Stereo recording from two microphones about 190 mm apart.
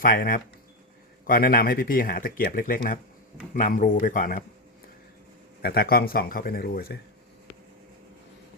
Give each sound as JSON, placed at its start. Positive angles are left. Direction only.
{"t": 0.0, "sound": "speech", "side_deg": 50}
{"t": 5.6, "sound": "speech", "side_deg": 55}